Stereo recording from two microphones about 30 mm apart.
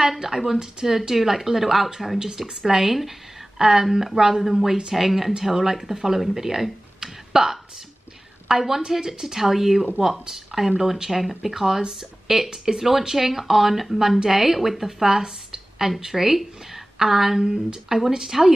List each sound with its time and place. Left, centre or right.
0.2 s a woman's voice: centre
2.1 s a woman's voice: right
7.0 s a sound: centre
8.5 s a woman's voice: centre
10.0 s a woman's voice: centre
12.4 s speech: right
13.1 s a woman's voice: centre